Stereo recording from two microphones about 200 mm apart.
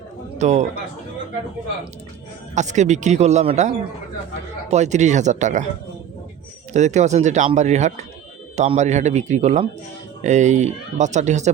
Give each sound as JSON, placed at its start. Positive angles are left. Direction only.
{"t": 0.3, "sound": "a man's voice", "side_deg": -35}
{"t": 2.6, "sound": "speech", "side_deg": -35}
{"t": 4.7, "sound": "speech", "side_deg": -35}
{"t": 6.7, "sound": "speech", "side_deg": -35}